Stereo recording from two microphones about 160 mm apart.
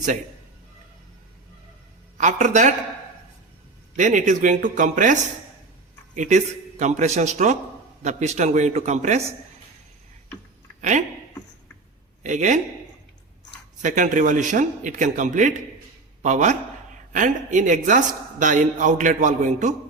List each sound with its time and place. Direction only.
2.1 s speech: 50° right (ahead or behind)
3.9 s speech: 50° right (ahead or behind)
10.8 s a sound: 50° right (ahead or behind)
12.2 s speech: 50° right (ahead or behind)
13.8 s speech: 50° right (ahead or behind)